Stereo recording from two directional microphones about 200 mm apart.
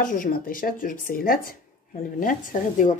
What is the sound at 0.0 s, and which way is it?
Speech, 40° left (ahead or behind).